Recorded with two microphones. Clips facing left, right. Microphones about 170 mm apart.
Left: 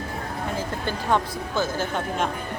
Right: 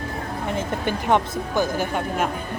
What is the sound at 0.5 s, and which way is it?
Speech, 20° right (ahead or behind).